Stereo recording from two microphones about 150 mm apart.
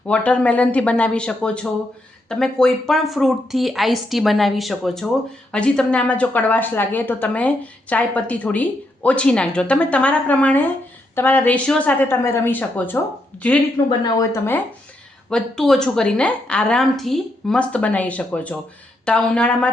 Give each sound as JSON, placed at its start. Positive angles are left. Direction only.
{"t": 0.1, "sound": "a woman's voice", "side_deg": 10}
{"t": 14.0, "sound": "speech", "side_deg": 20}
{"t": 15.3, "sound": "a woman's voice", "side_deg": 5}